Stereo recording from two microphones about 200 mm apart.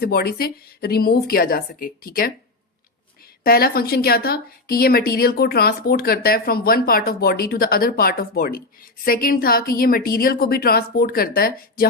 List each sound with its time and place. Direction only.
0.0 s a woman's voice: 50° left (ahead or behind)
3.4 s a woman's voice: 50° left (ahead or behind)